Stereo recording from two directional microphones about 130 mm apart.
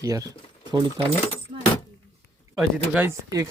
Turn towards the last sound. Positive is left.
turn(degrees=-25)  # may be behind; listen again after turning